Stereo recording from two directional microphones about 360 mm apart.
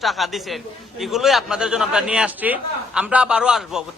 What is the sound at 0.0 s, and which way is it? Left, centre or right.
A man's voice, centre.